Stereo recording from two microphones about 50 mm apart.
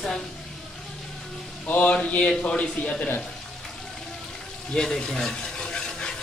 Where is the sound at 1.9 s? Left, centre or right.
Left.